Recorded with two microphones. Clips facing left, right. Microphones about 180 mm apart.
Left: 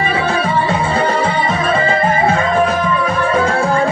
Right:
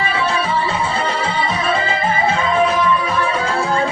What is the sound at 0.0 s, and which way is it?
Music, 50° left (ahead or behind).